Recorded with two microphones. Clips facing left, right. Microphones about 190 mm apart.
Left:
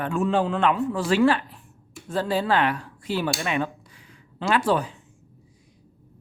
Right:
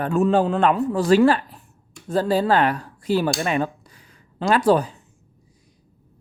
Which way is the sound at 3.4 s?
40° right (ahead or behind).